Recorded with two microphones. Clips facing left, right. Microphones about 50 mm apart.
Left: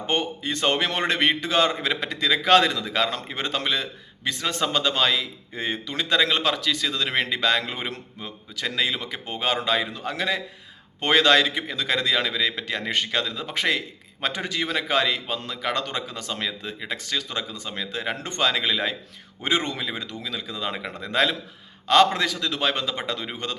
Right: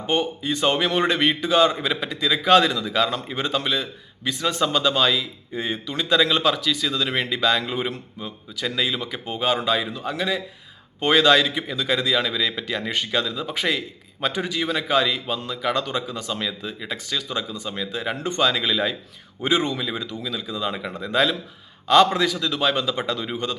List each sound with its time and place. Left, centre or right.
0.1 s a man's voice: left
6.1 s a man's voice: left
8.6 s a man's voice: left
11.0 s a man's voice: left
12.3 s a man's voice: left